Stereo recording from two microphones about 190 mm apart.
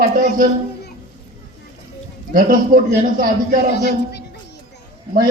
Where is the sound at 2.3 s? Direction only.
45° right (ahead or behind).